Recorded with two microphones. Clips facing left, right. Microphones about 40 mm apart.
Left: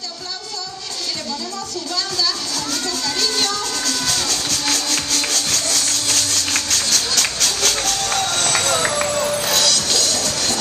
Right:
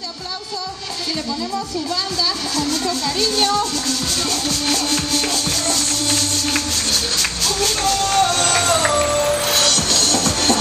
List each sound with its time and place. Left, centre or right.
4.9 s music: centre
5.7 s music: right
7.2 s music: left
8.2 s music: right